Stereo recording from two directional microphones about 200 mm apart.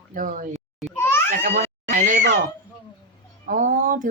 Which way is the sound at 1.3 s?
40° right (ahead or behind).